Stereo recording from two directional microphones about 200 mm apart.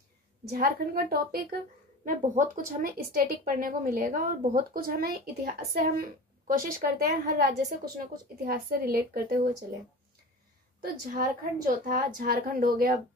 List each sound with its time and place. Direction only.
0.5 s speech: 45° right (ahead or behind)
10.8 s speech: 45° right (ahead or behind)